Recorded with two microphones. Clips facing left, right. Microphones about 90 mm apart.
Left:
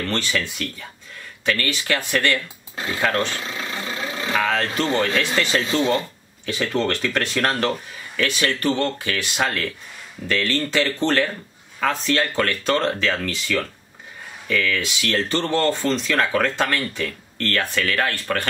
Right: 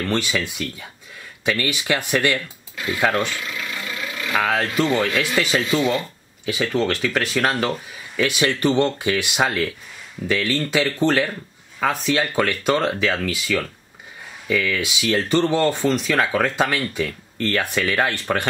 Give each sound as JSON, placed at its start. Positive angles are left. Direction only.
{"t": 0.0, "sound": "speech", "side_deg": -15}
{"t": 2.7, "sound": "a sound", "side_deg": 30}
{"t": 3.0, "sound": "speech", "side_deg": -15}
{"t": 3.3, "sound": "vehicle", "side_deg": 30}
{"t": 4.4, "sound": "speech", "side_deg": -10}
{"t": 5.7, "sound": "speech", "side_deg": 30}
{"t": 6.4, "sound": "speech", "side_deg": -5}